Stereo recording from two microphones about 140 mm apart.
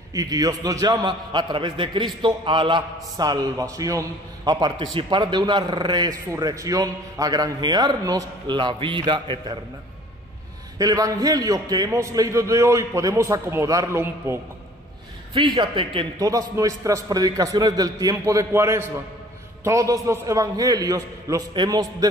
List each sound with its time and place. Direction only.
0.1 s a man's voice: 25° right (ahead or behind)
3.2 s a man's voice: 25° right (ahead or behind)
10.8 s a man's voice: 25° right (ahead or behind)
15.3 s a man's voice: 35° right (ahead or behind)
16.2 s a man's voice: 25° right (ahead or behind)